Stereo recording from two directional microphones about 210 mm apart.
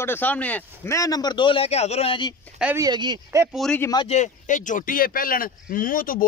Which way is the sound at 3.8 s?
20° left (ahead or behind).